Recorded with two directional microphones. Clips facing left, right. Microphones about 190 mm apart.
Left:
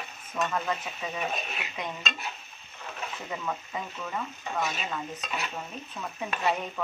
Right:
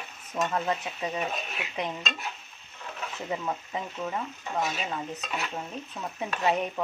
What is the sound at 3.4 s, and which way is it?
Speech, 25° right (ahead or behind).